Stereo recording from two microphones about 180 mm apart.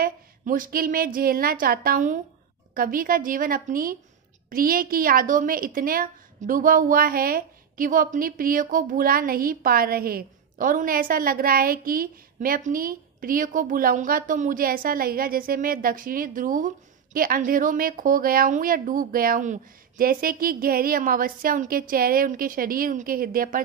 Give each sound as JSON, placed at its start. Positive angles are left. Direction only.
{"t": 0.0, "sound": "a woman's voice", "side_deg": -50}